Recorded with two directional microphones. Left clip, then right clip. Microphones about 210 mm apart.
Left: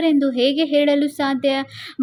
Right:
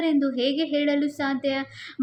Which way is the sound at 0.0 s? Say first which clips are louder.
Left 6 dB; 40° left (ahead or behind).